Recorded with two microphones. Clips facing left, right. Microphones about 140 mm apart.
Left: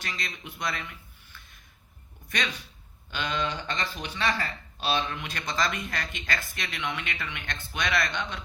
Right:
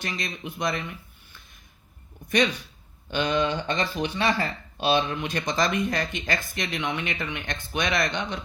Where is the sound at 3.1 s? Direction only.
20° right (ahead or behind).